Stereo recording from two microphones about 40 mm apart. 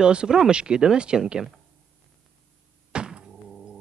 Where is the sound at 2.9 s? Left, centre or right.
Right.